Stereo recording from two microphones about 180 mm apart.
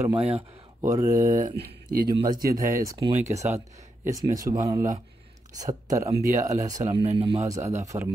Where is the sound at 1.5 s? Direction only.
60° right (ahead or behind).